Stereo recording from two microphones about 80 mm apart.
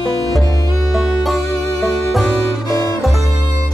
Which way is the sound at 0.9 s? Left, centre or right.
Centre.